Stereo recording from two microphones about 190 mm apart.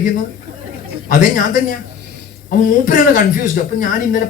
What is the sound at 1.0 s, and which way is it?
Speech, 45° left (ahead or behind).